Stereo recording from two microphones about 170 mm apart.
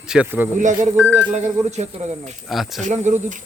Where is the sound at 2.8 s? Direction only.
45° right (ahead or behind).